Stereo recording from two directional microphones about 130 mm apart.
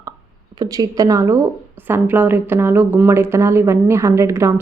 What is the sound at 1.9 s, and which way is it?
Speech, 15° right (ahead or behind).